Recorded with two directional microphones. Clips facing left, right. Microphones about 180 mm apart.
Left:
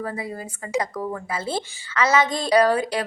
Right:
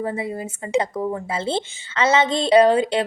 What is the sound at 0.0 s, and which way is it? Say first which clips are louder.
Speech: right 4 dB; 25° right (ahead or behind).